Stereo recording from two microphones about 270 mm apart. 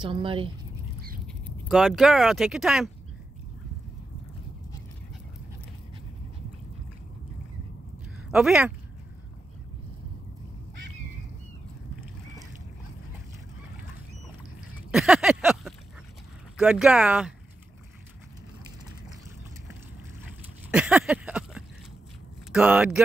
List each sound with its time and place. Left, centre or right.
0.0 s speech: centre
1.2 s speech: centre
8.3 s speech: centre
14.9 s a sound: centre
16.5 s speech: centre
20.7 s a sound: centre
22.5 s speech: centre